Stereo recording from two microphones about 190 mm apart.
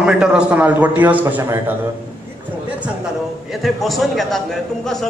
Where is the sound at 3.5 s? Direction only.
Centre (ahead or behind).